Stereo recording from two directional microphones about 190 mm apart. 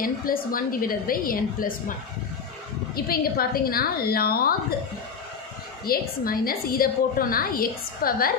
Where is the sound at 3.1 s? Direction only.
50° left (ahead or behind).